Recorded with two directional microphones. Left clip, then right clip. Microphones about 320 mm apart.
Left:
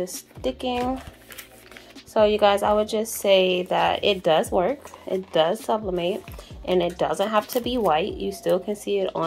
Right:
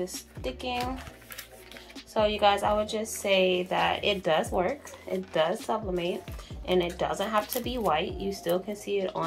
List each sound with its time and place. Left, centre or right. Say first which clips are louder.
0.4 s a woman's voice: left 7 dB; left
2.1 s a woman's voice: left 6 dB; left
8.6 s speech: left 5 dB; left